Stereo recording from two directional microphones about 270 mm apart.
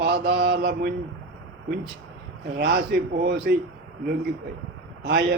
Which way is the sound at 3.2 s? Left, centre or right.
Right.